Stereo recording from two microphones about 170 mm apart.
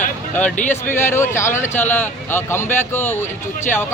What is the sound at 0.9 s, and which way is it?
Speech, 15° left (ahead or behind).